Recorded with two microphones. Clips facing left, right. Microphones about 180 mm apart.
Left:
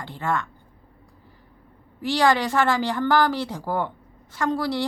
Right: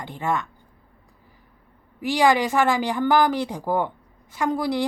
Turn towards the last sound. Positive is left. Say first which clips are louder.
# right 1 dB
turn(degrees=-15)  # may be behind; listen again after turning